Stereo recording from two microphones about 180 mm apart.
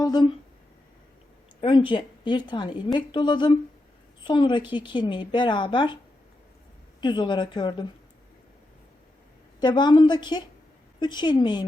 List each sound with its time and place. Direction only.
0.0 s a sound: 20° left (ahead or behind)
1.6 s a woman's voice: 25° left (ahead or behind)
7.0 s speech: 25° left (ahead or behind)
9.6 s speech: 25° left (ahead or behind)